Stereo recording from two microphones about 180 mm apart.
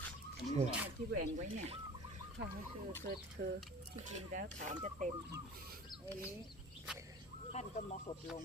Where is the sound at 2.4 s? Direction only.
70° right (ahead or behind).